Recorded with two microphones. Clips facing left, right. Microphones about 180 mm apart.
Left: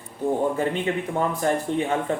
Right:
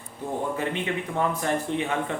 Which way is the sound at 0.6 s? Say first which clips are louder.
Left 4 dB; 35° left (ahead or behind).